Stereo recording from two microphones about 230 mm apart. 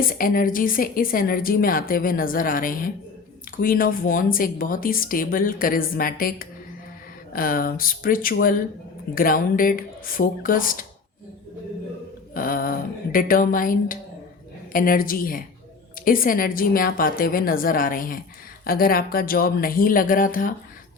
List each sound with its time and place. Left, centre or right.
0.0 s a woman's voice: left
12.3 s a sound: left
14.7 s a woman's voice: left